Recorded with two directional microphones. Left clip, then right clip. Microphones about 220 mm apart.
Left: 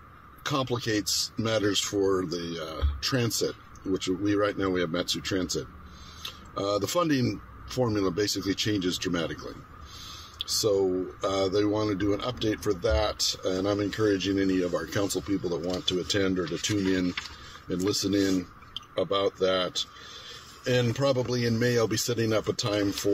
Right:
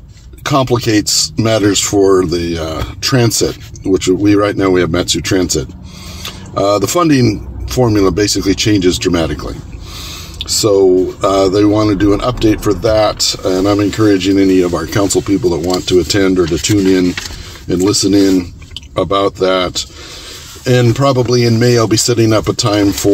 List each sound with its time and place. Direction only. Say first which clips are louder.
0.4 s speech: right 16 dB; 10° left (ahead or behind)
11.1 s speech: right 16 dB; 15° left (ahead or behind)